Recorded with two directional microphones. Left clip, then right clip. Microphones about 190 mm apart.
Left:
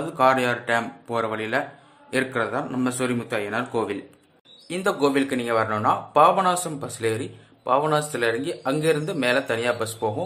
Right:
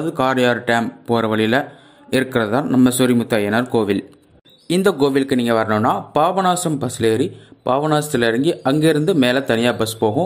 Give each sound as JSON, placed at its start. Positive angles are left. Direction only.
{"t": 0.2, "sound": "speech", "side_deg": -35}